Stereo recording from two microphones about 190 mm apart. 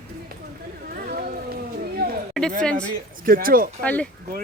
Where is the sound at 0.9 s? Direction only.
50° right (ahead or behind).